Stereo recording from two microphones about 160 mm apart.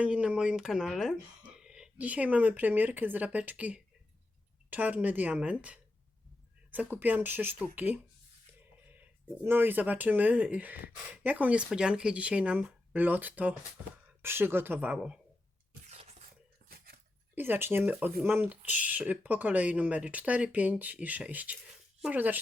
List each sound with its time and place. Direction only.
0.0 s speech: 5° right (ahead or behind)
9.0 s speech: 10° right (ahead or behind)
15.9 s a sound: 45° right (ahead or behind)
16.6 s dog: 75° right (ahead or behind)
17.3 s speech: 10° right (ahead or behind)